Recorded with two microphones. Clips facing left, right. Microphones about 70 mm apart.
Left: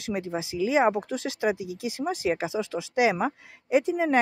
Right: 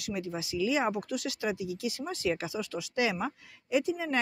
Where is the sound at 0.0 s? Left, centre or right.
Left.